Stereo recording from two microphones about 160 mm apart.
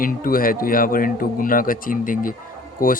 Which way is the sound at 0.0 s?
65° left (ahead or behind).